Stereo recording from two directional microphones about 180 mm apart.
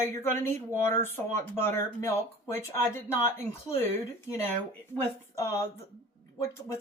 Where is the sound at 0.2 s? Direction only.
15° left (ahead or behind).